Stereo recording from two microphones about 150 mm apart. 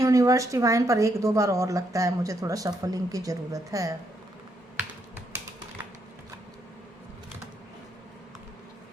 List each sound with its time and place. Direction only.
0.0 s speech: 20° right (ahead or behind)